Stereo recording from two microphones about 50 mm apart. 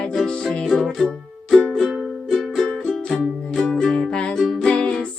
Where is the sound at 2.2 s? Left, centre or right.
Centre.